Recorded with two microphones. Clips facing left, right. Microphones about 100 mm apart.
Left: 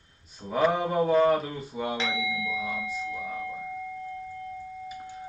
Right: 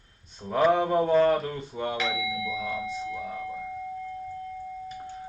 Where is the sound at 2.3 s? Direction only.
30° right (ahead or behind).